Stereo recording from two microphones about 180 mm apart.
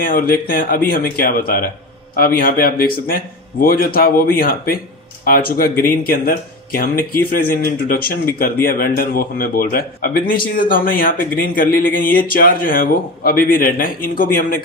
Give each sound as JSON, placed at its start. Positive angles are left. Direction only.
{"t": 0.0, "sound": "speech", "side_deg": 55}